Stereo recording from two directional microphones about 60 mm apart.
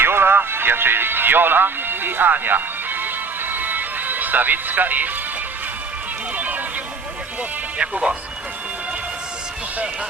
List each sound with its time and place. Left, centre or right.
0.0 s music: right
6.3 s music: right
7.8 s speech: centre